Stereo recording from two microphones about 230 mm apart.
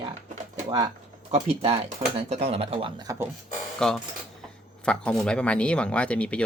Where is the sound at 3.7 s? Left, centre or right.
Centre.